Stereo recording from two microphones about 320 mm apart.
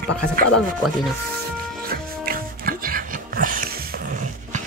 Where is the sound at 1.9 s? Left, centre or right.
Right.